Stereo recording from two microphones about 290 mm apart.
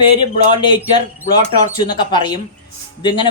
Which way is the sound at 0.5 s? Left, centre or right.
Centre.